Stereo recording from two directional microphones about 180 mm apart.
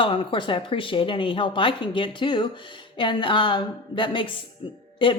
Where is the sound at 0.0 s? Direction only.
30° left (ahead or behind).